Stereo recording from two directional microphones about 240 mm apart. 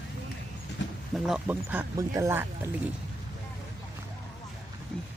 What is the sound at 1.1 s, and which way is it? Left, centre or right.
Speech, centre.